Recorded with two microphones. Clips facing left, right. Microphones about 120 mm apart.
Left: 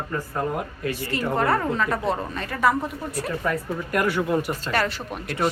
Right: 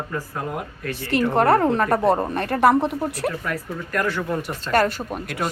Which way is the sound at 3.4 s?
10° left (ahead or behind).